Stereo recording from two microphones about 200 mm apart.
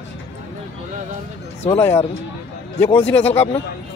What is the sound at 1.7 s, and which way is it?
Speech, 10° left (ahead or behind).